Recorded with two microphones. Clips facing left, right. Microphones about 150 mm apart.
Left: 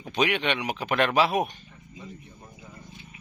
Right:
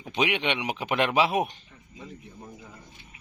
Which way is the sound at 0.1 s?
20° right (ahead or behind).